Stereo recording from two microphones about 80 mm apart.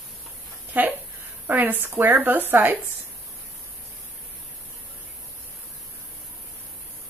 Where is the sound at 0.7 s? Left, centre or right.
Right.